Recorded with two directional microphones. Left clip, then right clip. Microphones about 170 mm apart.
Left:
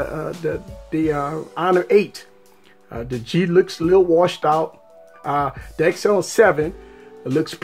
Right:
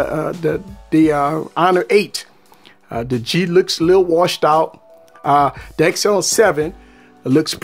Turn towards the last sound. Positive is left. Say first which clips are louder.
# right 5 dB
turn(degrees=-35)  # may be behind; listen again after turning